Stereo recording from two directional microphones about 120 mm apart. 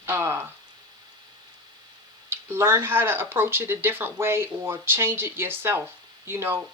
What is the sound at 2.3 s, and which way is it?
Speech, 20° right (ahead or behind).